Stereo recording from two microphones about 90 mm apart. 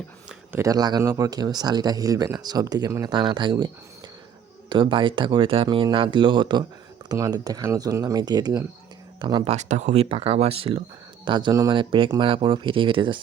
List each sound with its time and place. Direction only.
0.5 s speech: 40° right (ahead or behind)
3.1 s speech: 60° right (ahead or behind)
4.7 s speech: 65° right (ahead or behind)
5.7 s speech: 70° right (ahead or behind); by 9.4 s 55° right (ahead or behind)
10.1 s speech: 90° right
11.3 s speech: 60° right (ahead or behind)